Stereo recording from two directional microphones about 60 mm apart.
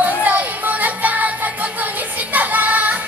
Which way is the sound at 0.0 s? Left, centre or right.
Right.